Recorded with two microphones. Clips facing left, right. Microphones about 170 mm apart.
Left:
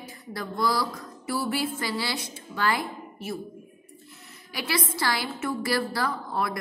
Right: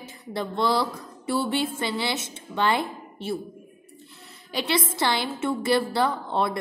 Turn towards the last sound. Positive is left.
turn(degrees=-25)  # may be behind; listen again after turning